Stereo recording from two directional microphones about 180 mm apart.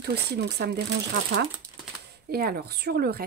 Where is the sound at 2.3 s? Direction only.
60° right (ahead or behind).